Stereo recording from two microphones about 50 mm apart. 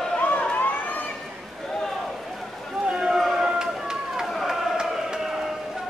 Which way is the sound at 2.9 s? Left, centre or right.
Centre.